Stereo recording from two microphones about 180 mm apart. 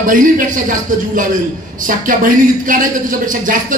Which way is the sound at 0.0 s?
45° right (ahead or behind).